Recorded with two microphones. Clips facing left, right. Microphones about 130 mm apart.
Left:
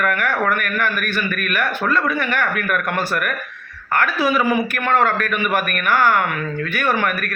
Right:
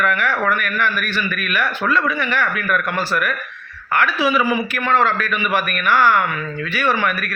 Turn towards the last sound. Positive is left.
turn(degrees=50)  # may be behind; listen again after turning